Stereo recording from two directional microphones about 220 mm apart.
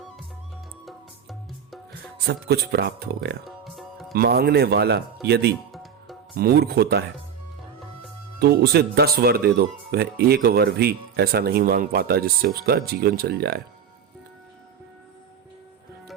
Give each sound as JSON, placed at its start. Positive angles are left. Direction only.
{"t": 0.9, "sound": "music", "side_deg": 0}
{"t": 1.9, "sound": "speech", "side_deg": -45}
{"t": 3.4, "sound": "music", "side_deg": 0}
{"t": 4.1, "sound": "speech", "side_deg": -45}
{"t": 5.7, "sound": "music", "side_deg": 0}
{"t": 6.3, "sound": "speech", "side_deg": -45}
{"t": 8.4, "sound": "speech", "side_deg": -45}